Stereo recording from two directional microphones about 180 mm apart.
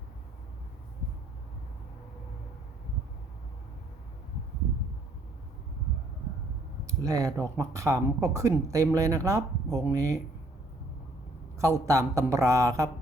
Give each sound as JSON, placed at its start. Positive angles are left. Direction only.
{"t": 6.8, "sound": "speech", "side_deg": -15}
{"t": 11.5, "sound": "speech", "side_deg": -15}